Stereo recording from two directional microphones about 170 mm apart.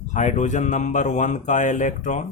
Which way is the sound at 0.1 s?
45° left (ahead or behind).